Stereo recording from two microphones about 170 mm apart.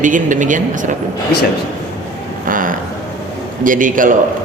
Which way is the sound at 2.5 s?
55° right (ahead or behind).